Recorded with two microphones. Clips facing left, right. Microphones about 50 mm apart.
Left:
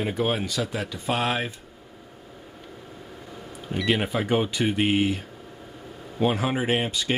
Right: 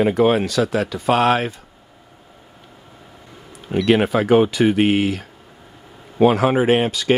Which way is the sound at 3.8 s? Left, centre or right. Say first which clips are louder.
Right 8 dB; right.